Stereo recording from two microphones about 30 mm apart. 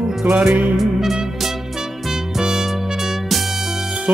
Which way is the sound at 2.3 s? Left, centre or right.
Centre.